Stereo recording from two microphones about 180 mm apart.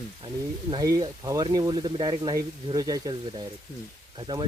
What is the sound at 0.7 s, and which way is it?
Speech, 20° right (ahead or behind).